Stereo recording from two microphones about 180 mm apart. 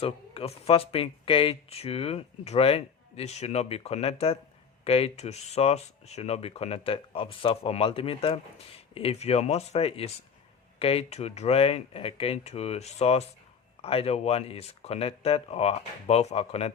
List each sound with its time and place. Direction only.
0.0 s speech: 35° left (ahead or behind)